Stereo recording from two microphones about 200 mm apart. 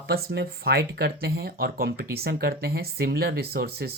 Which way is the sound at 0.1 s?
50° right (ahead or behind).